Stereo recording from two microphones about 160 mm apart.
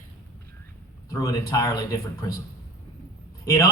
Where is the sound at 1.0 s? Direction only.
25° left (ahead or behind).